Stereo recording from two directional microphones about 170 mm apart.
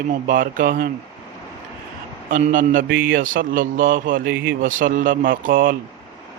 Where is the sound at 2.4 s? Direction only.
50° right (ahead or behind).